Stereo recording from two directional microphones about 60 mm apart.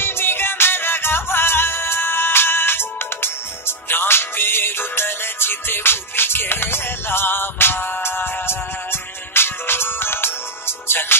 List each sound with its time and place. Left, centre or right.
0.0 s music: left